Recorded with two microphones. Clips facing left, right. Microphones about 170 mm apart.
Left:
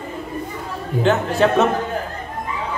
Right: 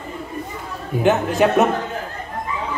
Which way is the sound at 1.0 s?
15° right (ahead or behind).